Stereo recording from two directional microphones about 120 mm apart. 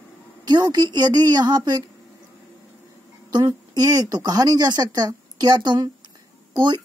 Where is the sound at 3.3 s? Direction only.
35° right (ahead or behind).